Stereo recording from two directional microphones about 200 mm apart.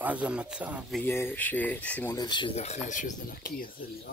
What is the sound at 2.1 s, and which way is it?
Speech, 20° left (ahead or behind).